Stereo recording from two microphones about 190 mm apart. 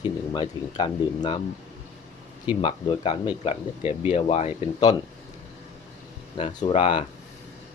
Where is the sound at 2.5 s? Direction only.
25° left (ahead or behind).